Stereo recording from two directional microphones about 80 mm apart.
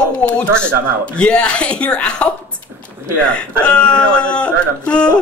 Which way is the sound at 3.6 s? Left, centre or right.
Centre.